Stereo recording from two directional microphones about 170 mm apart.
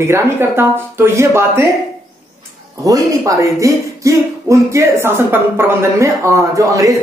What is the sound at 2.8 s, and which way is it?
Speech, 20° right (ahead or behind).